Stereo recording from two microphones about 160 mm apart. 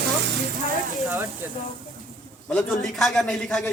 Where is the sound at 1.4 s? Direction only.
15° right (ahead or behind).